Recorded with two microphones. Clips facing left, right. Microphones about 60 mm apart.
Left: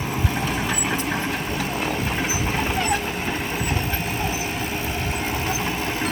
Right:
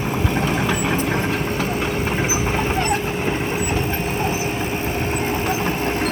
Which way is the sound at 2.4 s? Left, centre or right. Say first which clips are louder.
Right 3 dB; centre.